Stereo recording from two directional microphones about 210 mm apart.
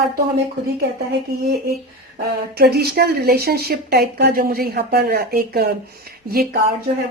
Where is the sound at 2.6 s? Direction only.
50° right (ahead or behind).